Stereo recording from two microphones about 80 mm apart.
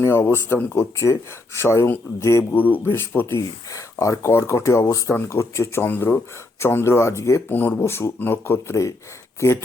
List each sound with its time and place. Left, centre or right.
0.0 s speech: left
2.5 s speech: left
3.7 s speech: left
5.8 s speech: left